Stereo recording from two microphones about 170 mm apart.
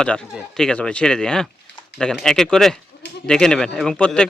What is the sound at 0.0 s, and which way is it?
Speech, 5° left (ahead or behind).